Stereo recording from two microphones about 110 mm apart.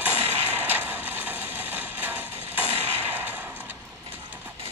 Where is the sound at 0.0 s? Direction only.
15° right (ahead or behind).